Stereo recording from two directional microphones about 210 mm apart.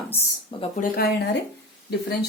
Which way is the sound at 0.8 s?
45° left (ahead or behind).